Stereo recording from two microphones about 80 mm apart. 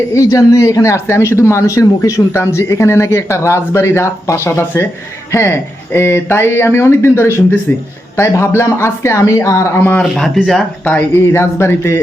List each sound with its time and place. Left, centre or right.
0.1 s speech: left
10.0 s speech: centre
11.1 s speech: left